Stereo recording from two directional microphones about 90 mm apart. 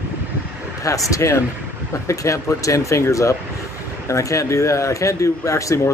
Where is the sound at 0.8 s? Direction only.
40° left (ahead or behind).